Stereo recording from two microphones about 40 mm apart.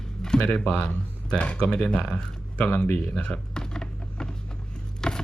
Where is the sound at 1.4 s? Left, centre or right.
Left.